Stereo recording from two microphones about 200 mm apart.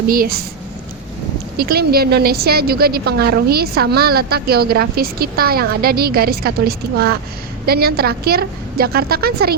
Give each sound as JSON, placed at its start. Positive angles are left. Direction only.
{"t": 0.1, "sound": "a woman's voice", "side_deg": -45}
{"t": 1.5, "sound": "a woman's voice", "side_deg": -50}